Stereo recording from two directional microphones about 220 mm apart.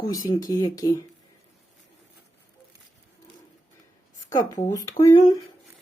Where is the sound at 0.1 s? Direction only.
15° left (ahead or behind).